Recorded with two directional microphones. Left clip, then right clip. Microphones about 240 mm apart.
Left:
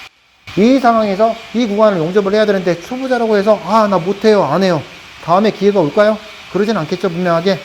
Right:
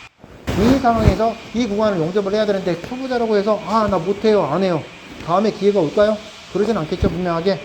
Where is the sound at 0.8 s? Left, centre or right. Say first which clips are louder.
Left 5 dB; left.